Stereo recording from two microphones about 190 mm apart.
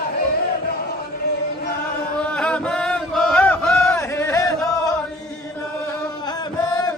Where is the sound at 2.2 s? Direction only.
5° left (ahead or behind).